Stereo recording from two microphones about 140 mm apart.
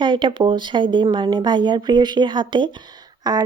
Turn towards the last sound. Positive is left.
turn(degrees=-25)  # may be behind; listen again after turning